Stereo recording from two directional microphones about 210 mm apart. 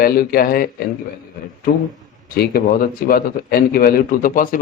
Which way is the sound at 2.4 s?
45° left (ahead or behind).